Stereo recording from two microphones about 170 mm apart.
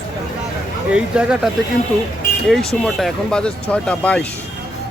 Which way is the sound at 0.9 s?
5° right (ahead or behind).